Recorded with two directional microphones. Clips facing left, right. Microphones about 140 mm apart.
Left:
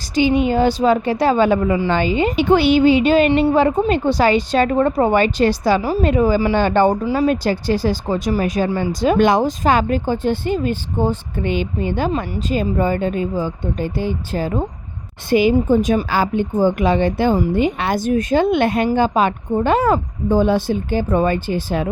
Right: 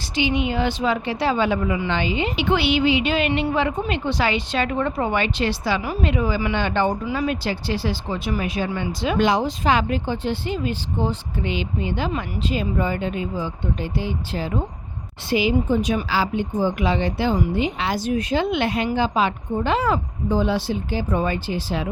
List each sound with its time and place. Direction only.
0.1 s a woman's voice: 40° left (ahead or behind)